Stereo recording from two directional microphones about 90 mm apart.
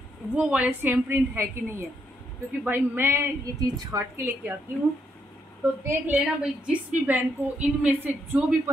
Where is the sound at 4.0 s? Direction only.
25° right (ahead or behind).